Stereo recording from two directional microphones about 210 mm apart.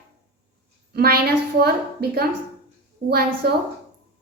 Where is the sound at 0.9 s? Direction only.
45° right (ahead or behind).